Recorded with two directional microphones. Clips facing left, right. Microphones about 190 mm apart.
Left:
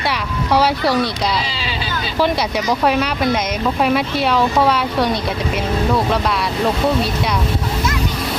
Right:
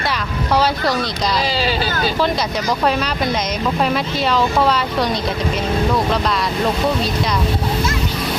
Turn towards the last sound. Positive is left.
turn(degrees=5)  # may be behind; listen again after turning